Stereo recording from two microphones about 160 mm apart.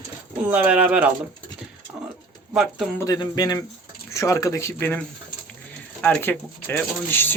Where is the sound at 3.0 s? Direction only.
25° left (ahead or behind).